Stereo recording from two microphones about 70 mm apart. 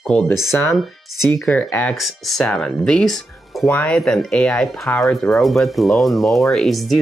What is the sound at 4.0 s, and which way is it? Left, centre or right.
Speech, centre.